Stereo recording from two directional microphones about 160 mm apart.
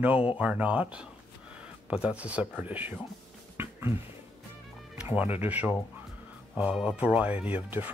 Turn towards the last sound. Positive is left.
turn(degrees=-10)  # may be behind; listen again after turning